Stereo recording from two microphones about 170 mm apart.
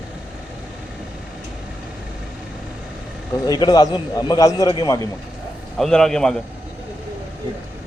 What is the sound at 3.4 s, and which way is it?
A man's voice, 20° left (ahead or behind).